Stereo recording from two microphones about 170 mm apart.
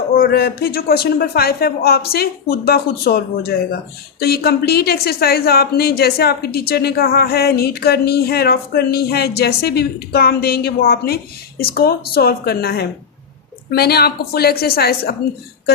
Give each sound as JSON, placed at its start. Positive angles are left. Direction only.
{"t": 0.2, "sound": "speech", "side_deg": 65}